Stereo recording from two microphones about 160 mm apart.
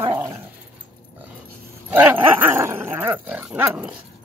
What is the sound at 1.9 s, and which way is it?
Dog, 10° right (ahead or behind).